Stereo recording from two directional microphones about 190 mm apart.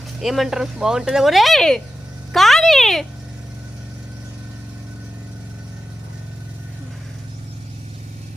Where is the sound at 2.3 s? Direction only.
Centre (ahead or behind).